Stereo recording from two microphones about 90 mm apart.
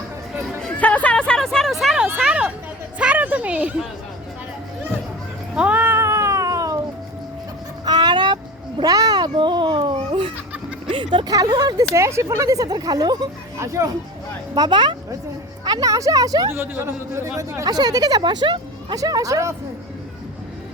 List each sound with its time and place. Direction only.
0.6 s a sound: 15° left (ahead or behind); by 2.0 s centre (ahead or behind)
2.2 s a sound: 15° right (ahead or behind)
5.5 s cat: 15° right (ahead or behind)
6.0 s cat: 30° right (ahead or behind)
7.9 s vehicle: 50° right (ahead or behind)
8.8 s a sound: 45° right (ahead or behind)
9.3 s a sound: 65° right (ahead or behind)
11.3 s speech: 50° right (ahead or behind)
11.9 s speech: 35° right (ahead or behind)
13.6 s speech: 35° right (ahead or behind)
14.5 s speech: 55° right (ahead or behind)
15.6 s speech: 45° right (ahead or behind)
16.5 s speech: 25° right (ahead or behind); by 18.9 s 60° right (ahead or behind)
18.9 s speech: 45° right (ahead or behind)